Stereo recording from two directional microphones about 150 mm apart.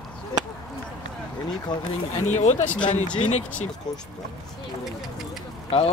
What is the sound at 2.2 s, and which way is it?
Speech, 55° left (ahead or behind).